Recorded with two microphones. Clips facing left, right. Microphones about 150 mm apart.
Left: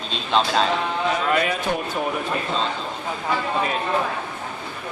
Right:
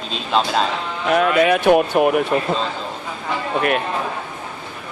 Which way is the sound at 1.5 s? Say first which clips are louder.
Right 10 dB; 70° right (ahead or behind).